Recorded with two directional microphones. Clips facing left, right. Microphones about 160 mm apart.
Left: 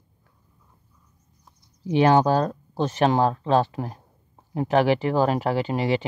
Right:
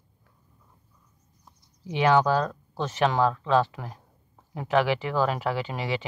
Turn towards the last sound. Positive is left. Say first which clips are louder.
# left 6 dB
turn(degrees=40)  # may be behind; listen again after turning